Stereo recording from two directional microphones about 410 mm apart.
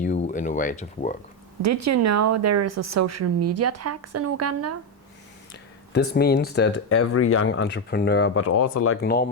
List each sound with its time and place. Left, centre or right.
0.0 s speech: centre
1.6 s speech: right
5.9 s speech: left